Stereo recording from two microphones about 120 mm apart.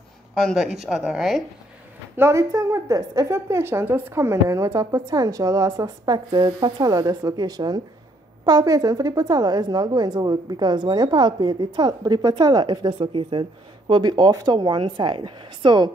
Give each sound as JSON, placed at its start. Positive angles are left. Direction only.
{"t": 0.4, "sound": "speech", "side_deg": 0}
{"t": 2.1, "sound": "a woman's voice", "side_deg": -25}